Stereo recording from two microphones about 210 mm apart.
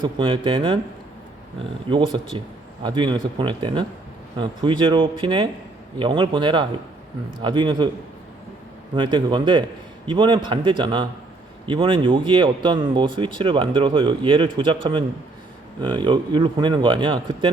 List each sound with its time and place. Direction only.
0.0 s speech: 25° right (ahead or behind)
1.9 s speech: 25° right (ahead or behind)
9.0 s speech: 25° right (ahead or behind)